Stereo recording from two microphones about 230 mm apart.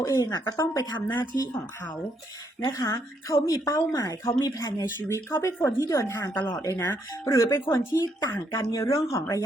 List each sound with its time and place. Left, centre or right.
0.0 s speech: centre
2.6 s speech: centre